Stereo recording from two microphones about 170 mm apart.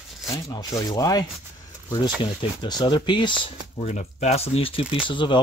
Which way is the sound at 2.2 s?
25° left (ahead or behind).